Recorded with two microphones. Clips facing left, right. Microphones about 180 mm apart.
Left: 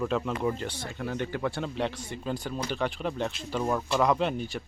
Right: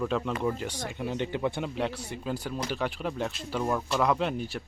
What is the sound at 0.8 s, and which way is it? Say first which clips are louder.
Speech: right 1 dB; 20° right (ahead or behind).